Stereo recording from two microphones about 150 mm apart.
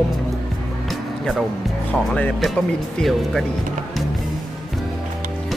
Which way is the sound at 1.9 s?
5° left (ahead or behind).